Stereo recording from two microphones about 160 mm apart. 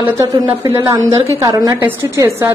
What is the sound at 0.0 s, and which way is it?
A woman's voice, 15° right (ahead or behind).